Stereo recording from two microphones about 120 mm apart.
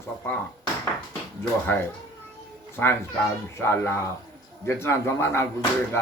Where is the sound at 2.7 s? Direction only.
20° left (ahead or behind).